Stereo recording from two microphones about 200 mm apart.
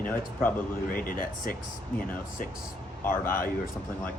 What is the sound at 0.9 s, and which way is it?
Speech, 45° left (ahead or behind).